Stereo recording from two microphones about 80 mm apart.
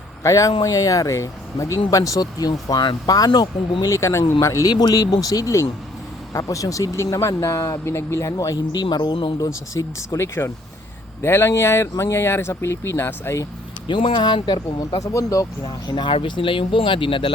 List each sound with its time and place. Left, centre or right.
0.2 s speech: left
3.8 s speech: left
4.7 s speech: left
9.7 s speech: left
10.1 s speech: left
13.8 s speech: left
14.8 s speech: left
15.6 s speech: left